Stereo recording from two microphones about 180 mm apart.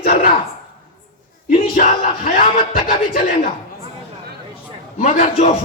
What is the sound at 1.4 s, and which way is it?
A man's voice, 45° left (ahead or behind).